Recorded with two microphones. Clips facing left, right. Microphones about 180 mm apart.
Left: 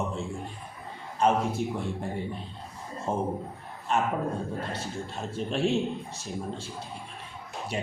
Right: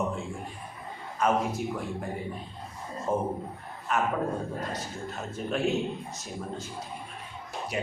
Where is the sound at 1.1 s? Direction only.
30° left (ahead or behind).